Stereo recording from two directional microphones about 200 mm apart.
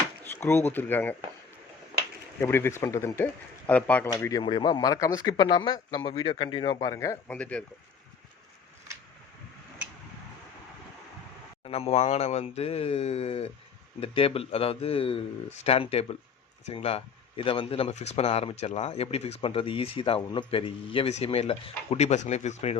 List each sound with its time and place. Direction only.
0.3 s speech: 10° left (ahead or behind)
2.4 s speech: 10° left (ahead or behind)
4.1 s speech: 15° left (ahead or behind)
11.6 s speech: 30° left (ahead or behind)